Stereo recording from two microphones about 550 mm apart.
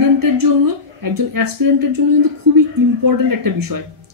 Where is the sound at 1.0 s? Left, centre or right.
Right.